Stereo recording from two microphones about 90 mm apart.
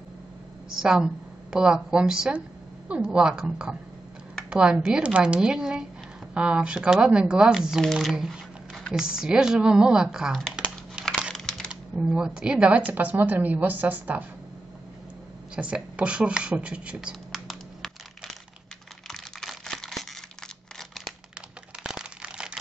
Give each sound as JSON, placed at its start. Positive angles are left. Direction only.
{"t": 0.7, "sound": "a woman's voice", "side_deg": -5}
{"t": 11.3, "sound": "computer keyboard", "side_deg": 5}
{"t": 11.7, "sound": "speech", "side_deg": -10}
{"t": 15.5, "sound": "speech", "side_deg": -15}
{"t": 17.3, "sound": "computer keyboard", "side_deg": 0}
{"t": 19.0, "sound": "computer keyboard", "side_deg": 5}
{"t": 21.8, "sound": "crumpling", "side_deg": -10}